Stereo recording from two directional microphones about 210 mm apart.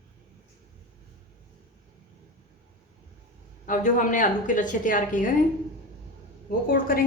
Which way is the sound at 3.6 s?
40° left (ahead or behind).